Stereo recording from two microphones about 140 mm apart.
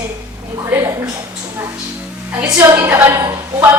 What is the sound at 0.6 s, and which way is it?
Speech, 20° right (ahead or behind).